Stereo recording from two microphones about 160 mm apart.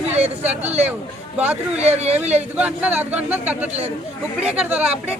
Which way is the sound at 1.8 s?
40° right (ahead or behind).